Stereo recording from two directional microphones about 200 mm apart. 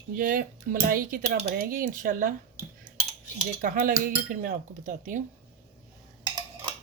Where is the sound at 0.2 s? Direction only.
45° right (ahead or behind).